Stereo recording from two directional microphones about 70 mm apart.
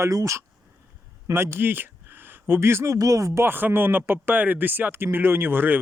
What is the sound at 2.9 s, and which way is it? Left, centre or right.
Speech, right.